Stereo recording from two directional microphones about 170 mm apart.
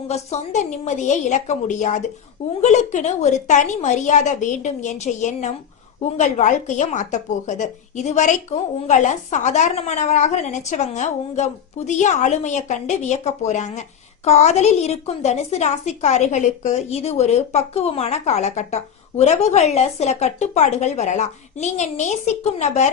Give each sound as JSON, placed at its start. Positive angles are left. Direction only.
{"t": 0.1, "sound": "a woman's voice", "side_deg": 40}